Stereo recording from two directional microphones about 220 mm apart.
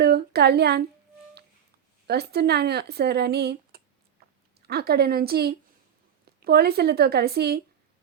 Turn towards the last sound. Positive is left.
turn(degrees=-45)  # may be behind; listen again after turning